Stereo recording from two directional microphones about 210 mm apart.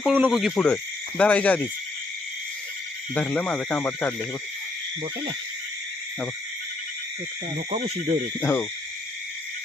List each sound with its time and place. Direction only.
0.0 s speech: 5° right (ahead or behind)
1.2 s owl: 5° left (ahead or behind)
3.2 s speech: 5° left (ahead or behind)
7.7 s owl: 35° right (ahead or behind)
8.4 s owl: 10° left (ahead or behind)